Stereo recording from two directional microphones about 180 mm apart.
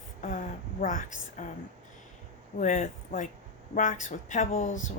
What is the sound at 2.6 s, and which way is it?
Speech, 45° left (ahead or behind).